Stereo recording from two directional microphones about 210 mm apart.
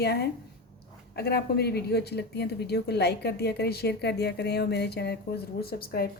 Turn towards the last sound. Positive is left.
turn(degrees=45)  # may be behind; listen again after turning